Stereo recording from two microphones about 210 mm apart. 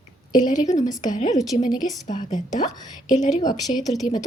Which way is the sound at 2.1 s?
20° left (ahead or behind).